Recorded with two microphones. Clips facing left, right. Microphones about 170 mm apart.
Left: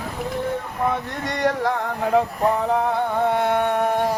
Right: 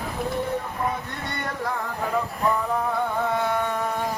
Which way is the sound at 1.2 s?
90° left.